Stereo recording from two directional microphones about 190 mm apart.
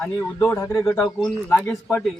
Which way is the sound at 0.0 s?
15° left (ahead or behind).